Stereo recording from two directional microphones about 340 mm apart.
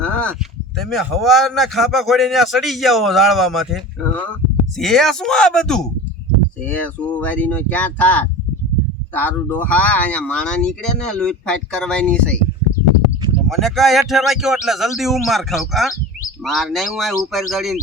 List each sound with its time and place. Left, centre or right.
0.0 s a sound: centre
0.8 s speech: centre
4.8 s speech: centre